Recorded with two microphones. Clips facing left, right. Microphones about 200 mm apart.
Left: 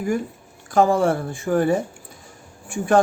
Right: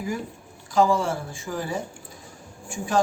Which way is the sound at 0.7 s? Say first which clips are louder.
Left 4 dB; 55° left (ahead or behind).